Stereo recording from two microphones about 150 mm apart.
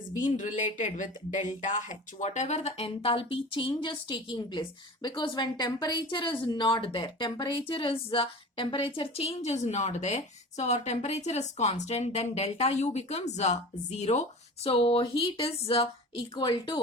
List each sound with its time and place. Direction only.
0.2 s a woman's voice: 55° left (ahead or behind); by 16.8 s 30° left (ahead or behind)